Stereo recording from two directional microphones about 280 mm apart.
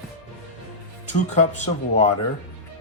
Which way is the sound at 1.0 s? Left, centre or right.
Left.